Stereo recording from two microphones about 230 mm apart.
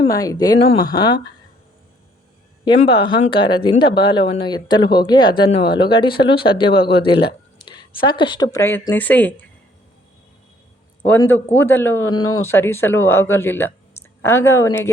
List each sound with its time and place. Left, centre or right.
0.0 s speech: centre
2.6 s speech: left; by 9.5 s centre
11.0 s speech: centre